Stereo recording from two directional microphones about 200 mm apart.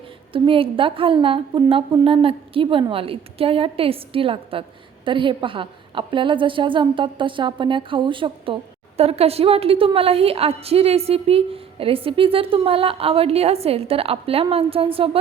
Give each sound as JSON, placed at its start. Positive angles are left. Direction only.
{"t": 0.3, "sound": "a woman's voice", "side_deg": -25}